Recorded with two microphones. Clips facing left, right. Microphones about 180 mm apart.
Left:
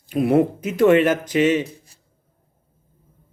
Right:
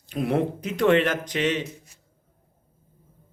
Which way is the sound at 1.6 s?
35° left (ahead or behind).